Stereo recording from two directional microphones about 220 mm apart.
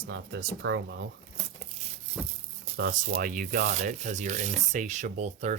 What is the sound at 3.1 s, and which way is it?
Sanding, 40° right (ahead or behind).